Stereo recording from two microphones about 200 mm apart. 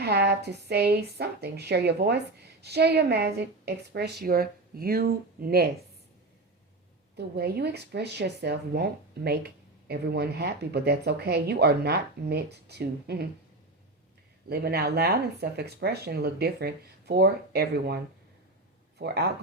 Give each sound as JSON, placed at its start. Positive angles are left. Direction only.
{"t": 0.0, "sound": "speech", "side_deg": -55}
{"t": 7.2, "sound": "speech", "side_deg": -55}
{"t": 14.5, "sound": "speech", "side_deg": -50}